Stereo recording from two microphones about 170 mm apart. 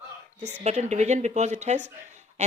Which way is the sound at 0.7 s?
40° right (ahead or behind).